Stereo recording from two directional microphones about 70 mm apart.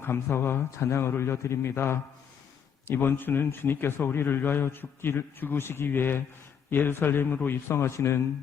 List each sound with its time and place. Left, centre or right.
0.0 s speech: left